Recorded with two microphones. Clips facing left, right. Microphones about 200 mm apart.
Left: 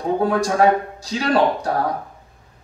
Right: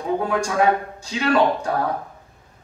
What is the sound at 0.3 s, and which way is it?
A man's voice, 35° left (ahead or behind).